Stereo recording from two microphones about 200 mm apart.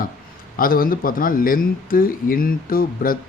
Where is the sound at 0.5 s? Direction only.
45° left (ahead or behind).